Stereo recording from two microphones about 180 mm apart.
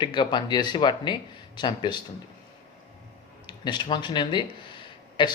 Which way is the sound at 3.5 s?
25° left (ahead or behind).